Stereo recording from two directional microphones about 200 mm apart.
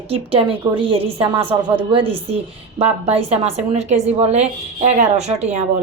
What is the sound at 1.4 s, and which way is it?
Speech, 10° right (ahead or behind).